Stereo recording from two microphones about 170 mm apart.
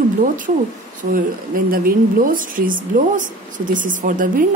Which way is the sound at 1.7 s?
55° right (ahead or behind).